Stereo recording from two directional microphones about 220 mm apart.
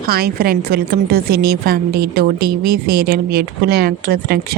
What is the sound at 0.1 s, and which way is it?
A woman's voice, 45° right (ahead or behind).